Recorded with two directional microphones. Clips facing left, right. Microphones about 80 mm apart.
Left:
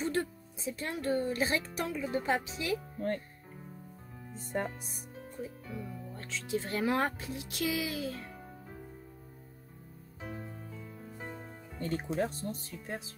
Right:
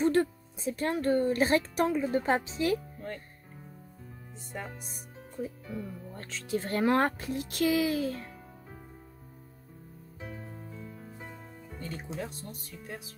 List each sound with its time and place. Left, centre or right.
0.0 s speech: right
1.8 s a woman's voice: right
4.4 s music: left
6.1 s speech: right
11.8 s speech: left